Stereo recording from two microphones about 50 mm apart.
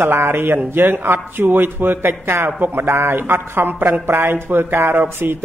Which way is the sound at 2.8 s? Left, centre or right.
Right.